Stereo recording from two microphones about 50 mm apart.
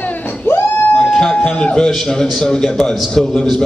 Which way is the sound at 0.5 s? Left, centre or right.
Left.